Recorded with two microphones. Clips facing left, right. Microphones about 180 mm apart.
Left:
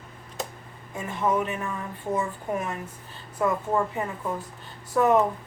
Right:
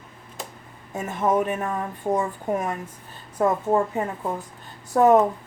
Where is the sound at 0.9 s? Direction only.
45° right (ahead or behind).